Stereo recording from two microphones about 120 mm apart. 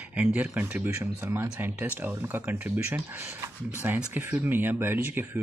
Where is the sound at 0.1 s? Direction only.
10° right (ahead or behind).